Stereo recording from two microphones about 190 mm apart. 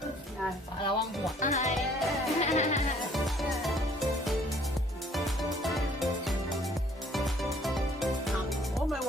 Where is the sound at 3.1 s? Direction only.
Centre (ahead or behind).